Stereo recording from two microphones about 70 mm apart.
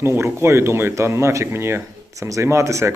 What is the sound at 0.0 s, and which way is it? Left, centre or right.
Speech, right.